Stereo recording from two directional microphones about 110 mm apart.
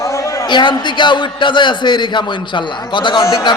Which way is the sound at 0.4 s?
45° left (ahead or behind).